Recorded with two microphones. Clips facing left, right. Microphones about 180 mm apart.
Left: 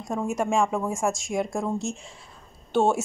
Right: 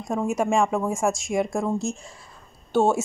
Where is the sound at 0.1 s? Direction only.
5° right (ahead or behind).